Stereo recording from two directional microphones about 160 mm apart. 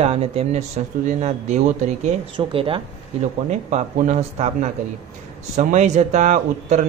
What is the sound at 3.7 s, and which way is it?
A man's voice, 45° right (ahead or behind).